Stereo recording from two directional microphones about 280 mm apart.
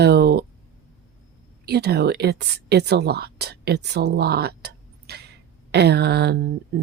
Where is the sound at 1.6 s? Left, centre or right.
Right.